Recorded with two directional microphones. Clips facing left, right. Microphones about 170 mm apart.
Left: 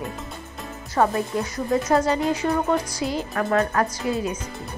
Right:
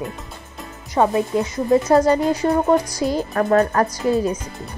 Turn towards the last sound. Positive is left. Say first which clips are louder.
# right 6 dB
turn(degrees=-40)  # may be behind; listen again after turning